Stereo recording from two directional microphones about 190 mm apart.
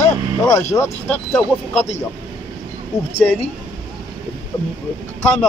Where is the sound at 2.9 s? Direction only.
15° left (ahead or behind).